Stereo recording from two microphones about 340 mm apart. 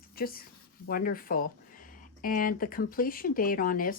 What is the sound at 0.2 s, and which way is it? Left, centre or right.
Speech, left.